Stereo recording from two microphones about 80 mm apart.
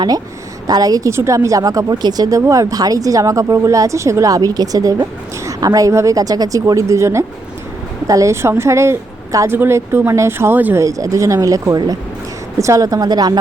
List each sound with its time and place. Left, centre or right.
0.7 s speech: right
1.1 s a woman's voice: right
10.8 s speech: right